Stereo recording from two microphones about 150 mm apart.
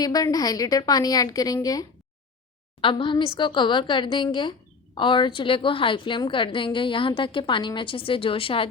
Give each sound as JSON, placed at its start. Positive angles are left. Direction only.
{"t": 0.0, "sound": "a woman's voice", "side_deg": 25}